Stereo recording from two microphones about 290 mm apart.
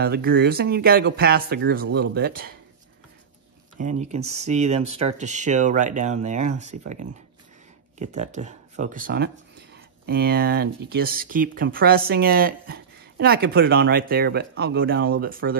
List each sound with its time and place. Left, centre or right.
0.0 s speech: right
3.8 s speech: right